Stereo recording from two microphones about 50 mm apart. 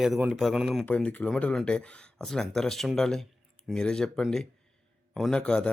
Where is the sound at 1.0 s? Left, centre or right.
Left.